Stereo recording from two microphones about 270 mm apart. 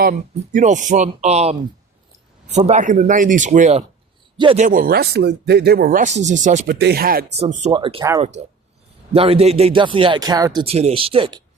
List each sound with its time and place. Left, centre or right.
0.0 s speech: right
6.7 s speech: right
7.6 s speech: centre